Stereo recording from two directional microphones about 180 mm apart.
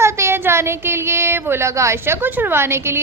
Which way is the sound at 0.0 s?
15° right (ahead or behind).